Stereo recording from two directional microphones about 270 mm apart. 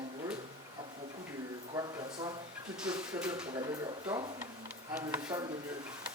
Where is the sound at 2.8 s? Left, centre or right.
Centre.